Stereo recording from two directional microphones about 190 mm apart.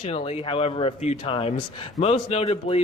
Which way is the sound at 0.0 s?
30° left (ahead or behind).